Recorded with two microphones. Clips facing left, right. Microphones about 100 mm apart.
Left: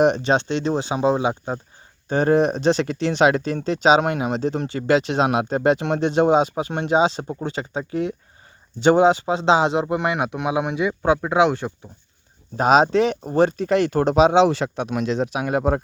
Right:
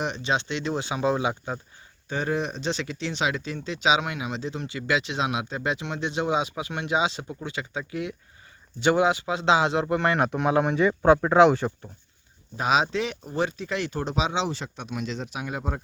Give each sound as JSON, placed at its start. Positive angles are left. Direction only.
{"t": 0.0, "sound": "speech", "side_deg": 50}
{"t": 2.0, "sound": "a man's voice", "side_deg": 45}
{"t": 12.5, "sound": "speech", "side_deg": 40}